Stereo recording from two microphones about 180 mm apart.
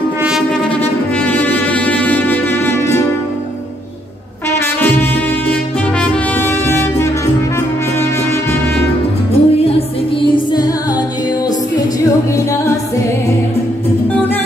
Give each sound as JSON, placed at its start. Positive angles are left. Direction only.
{"t": 1.1, "sound": "music", "side_deg": 10}
{"t": 4.5, "sound": "brass instrument", "side_deg": 10}
{"t": 9.3, "sound": "music", "side_deg": 35}
{"t": 12.4, "sound": "music", "side_deg": 15}